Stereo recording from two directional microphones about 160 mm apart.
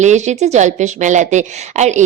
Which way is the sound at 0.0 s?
45° right (ahead or behind).